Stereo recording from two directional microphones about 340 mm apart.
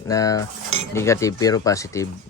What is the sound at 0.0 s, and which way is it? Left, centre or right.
Speech, centre.